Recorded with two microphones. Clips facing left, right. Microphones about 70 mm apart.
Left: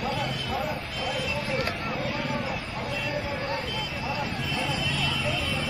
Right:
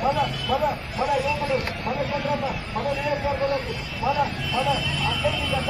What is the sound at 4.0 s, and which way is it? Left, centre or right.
Vehicle, right.